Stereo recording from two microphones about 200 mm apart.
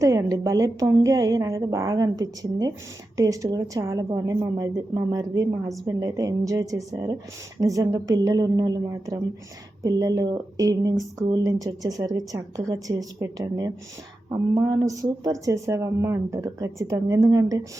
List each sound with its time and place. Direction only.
0.0 s speech: 15° right (ahead or behind)